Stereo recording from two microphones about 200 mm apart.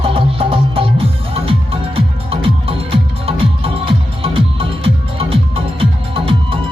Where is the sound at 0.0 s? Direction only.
30° right (ahead or behind).